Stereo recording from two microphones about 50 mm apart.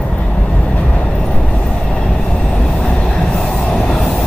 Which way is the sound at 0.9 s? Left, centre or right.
Left.